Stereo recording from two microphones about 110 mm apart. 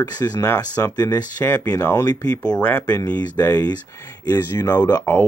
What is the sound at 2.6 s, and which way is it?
Speech, 15° left (ahead or behind).